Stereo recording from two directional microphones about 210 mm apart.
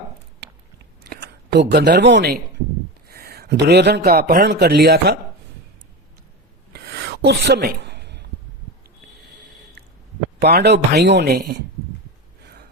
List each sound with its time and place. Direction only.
1.1 s a man's voice: 50° right (ahead or behind)
6.7 s rub: 50° right (ahead or behind)
10.4 s a man's voice: 50° right (ahead or behind)